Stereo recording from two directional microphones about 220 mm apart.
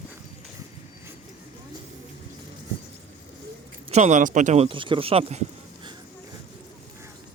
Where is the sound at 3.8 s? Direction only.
30° right (ahead or behind).